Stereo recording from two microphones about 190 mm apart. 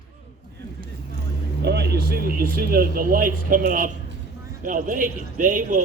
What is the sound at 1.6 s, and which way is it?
Speech, 60° right (ahead or behind).